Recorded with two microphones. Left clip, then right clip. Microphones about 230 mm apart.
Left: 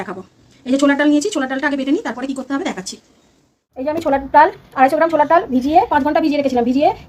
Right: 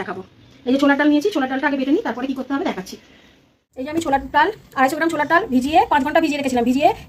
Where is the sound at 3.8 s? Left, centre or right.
Right.